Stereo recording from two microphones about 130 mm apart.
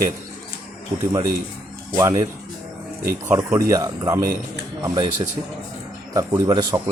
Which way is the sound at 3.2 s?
20° right (ahead or behind).